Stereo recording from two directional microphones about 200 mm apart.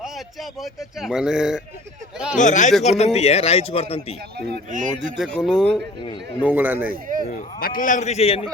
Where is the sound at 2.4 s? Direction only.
40° left (ahead or behind).